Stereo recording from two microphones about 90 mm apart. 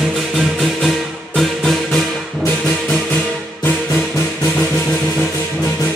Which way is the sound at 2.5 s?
15° left (ahead or behind).